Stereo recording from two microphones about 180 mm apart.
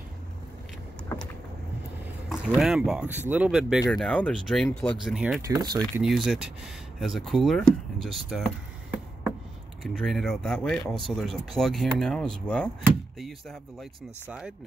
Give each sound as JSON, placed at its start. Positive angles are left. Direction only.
{"t": 2.2, "sound": "speech", "side_deg": 0}
{"t": 5.5, "sound": "speech", "side_deg": -25}
{"t": 5.9, "sound": "speech", "side_deg": 0}
{"t": 9.9, "sound": "speech", "side_deg": 0}